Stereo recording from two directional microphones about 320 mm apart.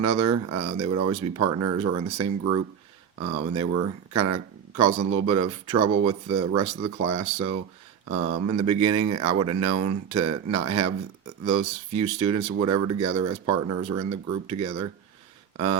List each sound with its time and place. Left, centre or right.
0.0 s speech: right
12.2 s speech: right